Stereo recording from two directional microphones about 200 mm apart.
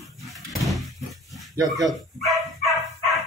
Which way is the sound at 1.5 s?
15° right (ahead or behind).